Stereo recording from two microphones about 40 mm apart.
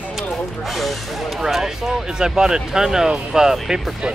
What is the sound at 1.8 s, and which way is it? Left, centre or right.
Speech, centre.